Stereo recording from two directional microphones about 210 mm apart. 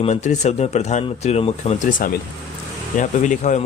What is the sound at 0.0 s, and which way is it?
A man's voice, 30° left (ahead or behind).